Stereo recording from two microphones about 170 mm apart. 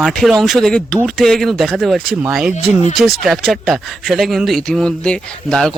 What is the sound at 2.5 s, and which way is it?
Speech, 40° left (ahead or behind).